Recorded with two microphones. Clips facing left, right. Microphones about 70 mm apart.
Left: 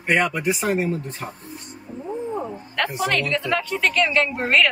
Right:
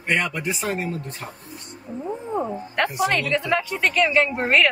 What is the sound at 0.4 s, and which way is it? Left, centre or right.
Speech, centre.